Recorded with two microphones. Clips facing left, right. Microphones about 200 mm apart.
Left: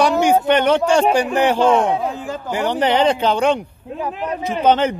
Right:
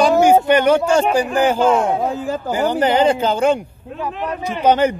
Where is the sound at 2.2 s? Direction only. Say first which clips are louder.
Right 3 dB; 35° right (ahead or behind).